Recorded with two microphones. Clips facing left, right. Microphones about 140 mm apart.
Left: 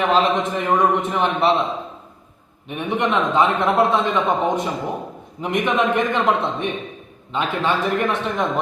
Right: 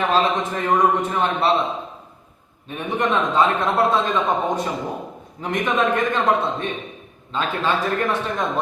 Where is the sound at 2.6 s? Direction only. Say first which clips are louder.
Left 1 dB; 20° left (ahead or behind).